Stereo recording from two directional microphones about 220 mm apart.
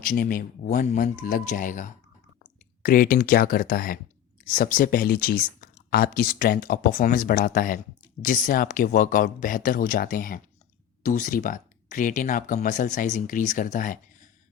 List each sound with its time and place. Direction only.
0.0 s speech: 40° left (ahead or behind)